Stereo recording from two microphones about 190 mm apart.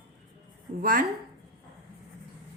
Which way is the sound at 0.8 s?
50° right (ahead or behind).